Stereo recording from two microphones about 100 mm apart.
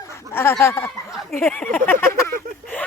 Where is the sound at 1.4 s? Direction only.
10° left (ahead or behind).